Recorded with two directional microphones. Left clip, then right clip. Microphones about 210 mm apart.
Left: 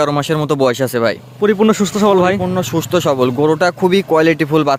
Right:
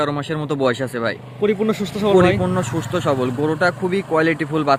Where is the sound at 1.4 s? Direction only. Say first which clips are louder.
Left 6 dB; 40° left (ahead or behind).